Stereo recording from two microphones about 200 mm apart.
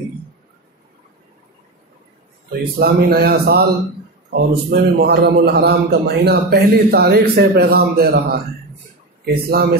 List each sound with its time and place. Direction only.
2.8 s a man's voice: 50° right (ahead or behind)